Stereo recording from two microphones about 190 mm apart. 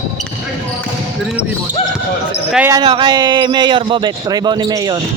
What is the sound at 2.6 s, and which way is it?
Speech, 20° right (ahead or behind).